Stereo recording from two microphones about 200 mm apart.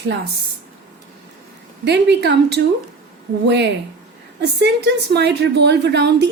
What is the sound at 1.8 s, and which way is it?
A woman's voice, 60° right (ahead or behind).